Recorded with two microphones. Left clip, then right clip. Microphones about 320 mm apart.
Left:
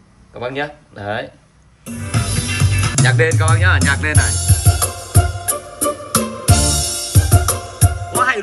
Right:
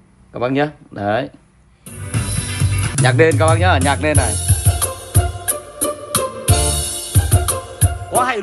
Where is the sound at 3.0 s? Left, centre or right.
Centre.